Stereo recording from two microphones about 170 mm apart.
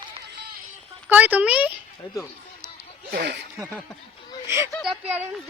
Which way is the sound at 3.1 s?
75° right (ahead or behind).